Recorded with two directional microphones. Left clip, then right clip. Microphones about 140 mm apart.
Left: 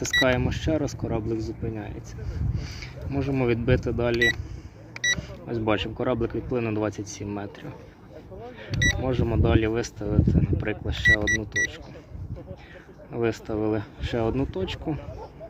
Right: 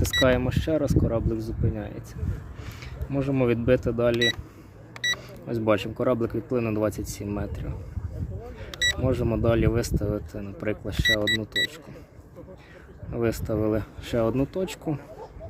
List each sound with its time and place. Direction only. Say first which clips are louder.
0.0 s speech: even; 45° right (ahead or behind)
5.5 s speech: right 2 dB; 45° right (ahead or behind)
8.7 s speech: even; 35° right (ahead or behind)
11.1 s speech: left 2 dB; 30° right (ahead or behind)
13.1 s speech: even; 45° right (ahead or behind)